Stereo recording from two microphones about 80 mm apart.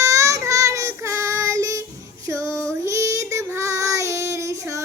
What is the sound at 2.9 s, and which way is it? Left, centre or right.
Child singing, right.